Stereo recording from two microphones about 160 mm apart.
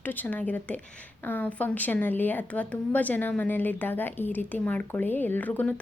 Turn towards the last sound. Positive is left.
turn(degrees=10)  # may be behind; listen again after turning